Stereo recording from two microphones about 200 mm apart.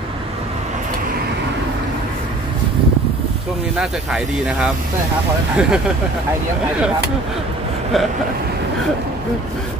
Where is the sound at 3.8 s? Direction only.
5° right (ahead or behind).